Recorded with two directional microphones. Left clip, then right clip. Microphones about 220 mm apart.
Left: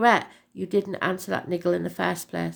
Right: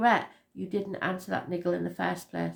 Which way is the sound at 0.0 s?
45° left (ahead or behind).